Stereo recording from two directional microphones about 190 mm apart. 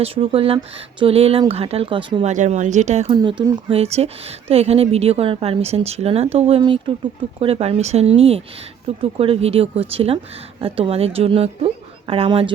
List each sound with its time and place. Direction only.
0.0 s speech: 30° right (ahead or behind)
2.3 s a woman's voice: 40° right (ahead or behind)
3.2 s a woman's voice: 25° right (ahead or behind)